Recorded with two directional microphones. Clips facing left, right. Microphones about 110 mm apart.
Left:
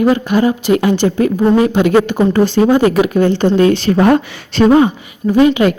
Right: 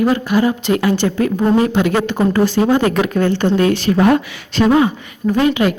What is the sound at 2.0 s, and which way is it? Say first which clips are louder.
Speech: left 4 dB; 10° left (ahead or behind).